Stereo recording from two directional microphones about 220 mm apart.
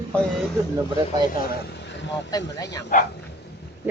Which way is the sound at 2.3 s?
15° left (ahead or behind).